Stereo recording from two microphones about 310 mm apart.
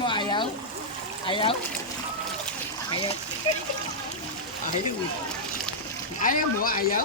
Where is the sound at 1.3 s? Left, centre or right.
Centre.